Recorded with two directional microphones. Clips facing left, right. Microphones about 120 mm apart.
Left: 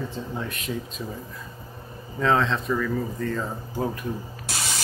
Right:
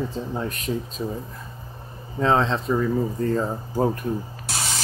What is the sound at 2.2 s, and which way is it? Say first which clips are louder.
Speech: right 2 dB; 25° right (ahead or behind).